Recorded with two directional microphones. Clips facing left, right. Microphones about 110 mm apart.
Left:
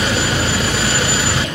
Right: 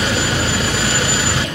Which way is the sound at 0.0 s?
20° left (ahead or behind).